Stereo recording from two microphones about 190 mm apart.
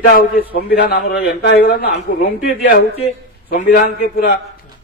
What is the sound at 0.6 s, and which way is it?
A man's voice, 55° left (ahead or behind).